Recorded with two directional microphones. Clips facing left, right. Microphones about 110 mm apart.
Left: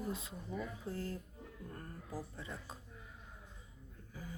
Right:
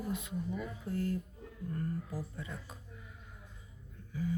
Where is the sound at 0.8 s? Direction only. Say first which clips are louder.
Right 7 dB; 30° left (ahead or behind).